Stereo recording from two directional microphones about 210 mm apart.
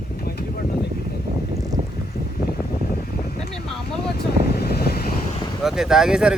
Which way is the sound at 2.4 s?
45° left (ahead or behind).